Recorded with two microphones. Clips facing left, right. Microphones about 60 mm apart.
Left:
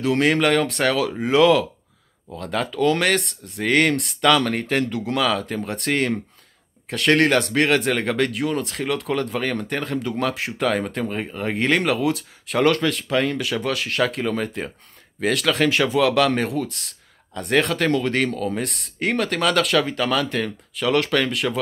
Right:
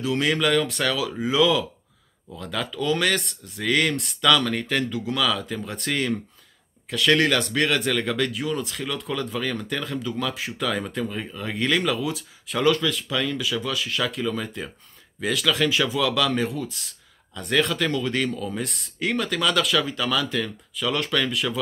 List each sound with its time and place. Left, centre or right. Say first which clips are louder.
0.0 s speech: left 4 dB; left
17.5 s speech: left 3 dB; left